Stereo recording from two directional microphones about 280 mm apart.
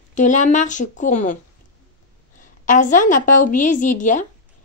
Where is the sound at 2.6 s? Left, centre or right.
Left.